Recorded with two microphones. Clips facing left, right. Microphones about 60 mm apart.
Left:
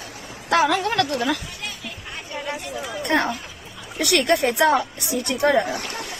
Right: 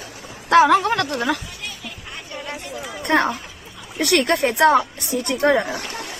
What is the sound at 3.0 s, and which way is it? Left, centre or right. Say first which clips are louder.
A woman's voice: right 3 dB; right.